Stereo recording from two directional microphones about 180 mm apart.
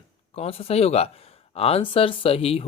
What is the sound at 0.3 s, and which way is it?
Speech, 35° left (ahead or behind).